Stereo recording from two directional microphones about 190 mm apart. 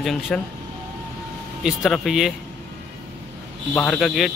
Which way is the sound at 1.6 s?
Centre (ahead or behind).